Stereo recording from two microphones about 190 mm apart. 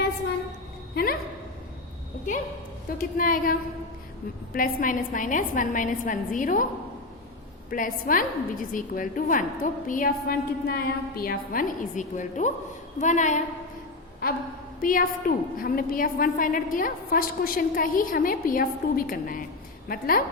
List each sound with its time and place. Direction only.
0.9 s a man's voice: 55° left (ahead or behind)
3.0 s a woman's voice: 45° left (ahead or behind)
4.5 s a woman's voice: 45° left (ahead or behind)
7.7 s a woman's voice: 50° left (ahead or behind)
14.8 s a woman's voice: 50° left (ahead or behind)